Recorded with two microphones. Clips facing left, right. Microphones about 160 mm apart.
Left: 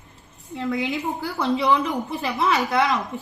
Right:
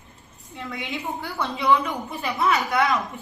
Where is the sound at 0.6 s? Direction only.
40° left (ahead or behind).